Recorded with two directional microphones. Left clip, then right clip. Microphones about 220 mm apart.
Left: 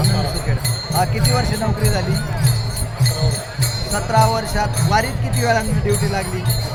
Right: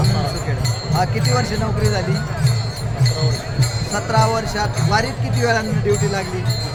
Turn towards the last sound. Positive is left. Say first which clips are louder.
# right 1 dB
turn(degrees=0)  # may be behind; listen again after turning